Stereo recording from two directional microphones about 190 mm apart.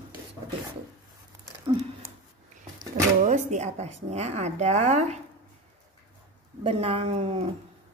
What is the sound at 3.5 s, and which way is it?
Speech, 35° right (ahead or behind).